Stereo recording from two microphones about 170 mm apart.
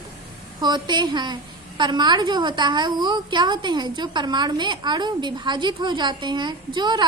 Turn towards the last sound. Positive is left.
turn(degrees=-25)  # may be behind; listen again after turning